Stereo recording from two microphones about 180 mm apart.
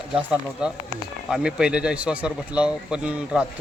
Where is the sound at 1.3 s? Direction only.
5° right (ahead or behind).